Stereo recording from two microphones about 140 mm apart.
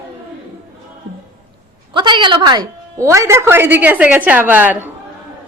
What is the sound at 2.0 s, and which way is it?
Speech, 35° right (ahead or behind).